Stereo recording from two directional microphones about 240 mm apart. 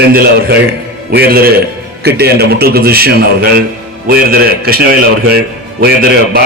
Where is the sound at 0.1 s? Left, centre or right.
Right.